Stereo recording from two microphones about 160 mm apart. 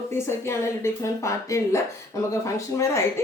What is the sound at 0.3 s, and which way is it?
A woman's voice, 15° left (ahead or behind).